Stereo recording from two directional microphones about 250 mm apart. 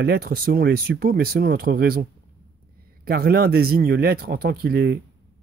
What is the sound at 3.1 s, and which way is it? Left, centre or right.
Speech, right.